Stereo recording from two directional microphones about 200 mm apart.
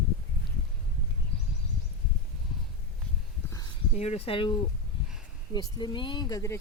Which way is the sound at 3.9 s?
35° left (ahead or behind).